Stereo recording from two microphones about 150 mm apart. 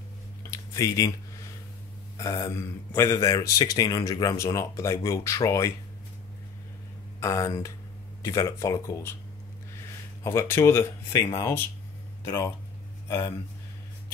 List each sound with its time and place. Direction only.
0.5 s a sound: 20° left (ahead or behind)
2.1 s speech: 20° left (ahead or behind)
7.2 s speech: 20° left (ahead or behind)
10.2 s speech: 20° left (ahead or behind)